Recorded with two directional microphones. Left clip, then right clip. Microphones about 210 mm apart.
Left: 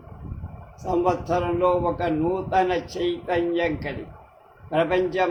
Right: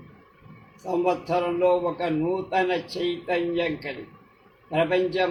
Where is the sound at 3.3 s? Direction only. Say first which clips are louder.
Left 2 dB; 15° left (ahead or behind).